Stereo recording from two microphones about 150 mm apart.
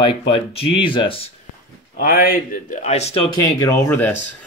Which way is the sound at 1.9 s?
75° left (ahead or behind).